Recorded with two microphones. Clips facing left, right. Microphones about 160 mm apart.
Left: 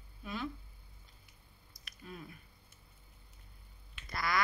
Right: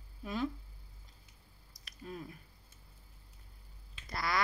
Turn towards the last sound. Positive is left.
turn(degrees=-30)  # may be behind; listen again after turning